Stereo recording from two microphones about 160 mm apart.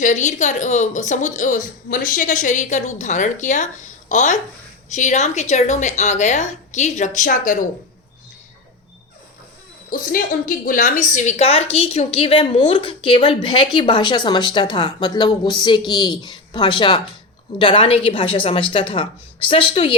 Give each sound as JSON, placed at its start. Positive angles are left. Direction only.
{"t": 0.0, "sound": "a woman's voice", "side_deg": 50}
{"t": 9.9, "sound": "a woman's voice", "side_deg": 60}